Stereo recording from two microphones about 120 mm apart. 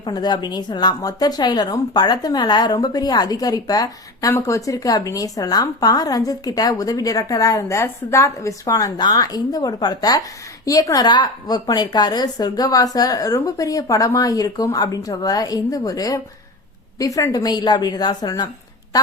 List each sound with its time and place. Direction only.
0.0 s speech: 35° left (ahead or behind)